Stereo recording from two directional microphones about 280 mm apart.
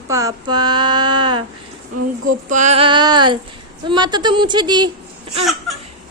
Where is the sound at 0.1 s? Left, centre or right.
Centre.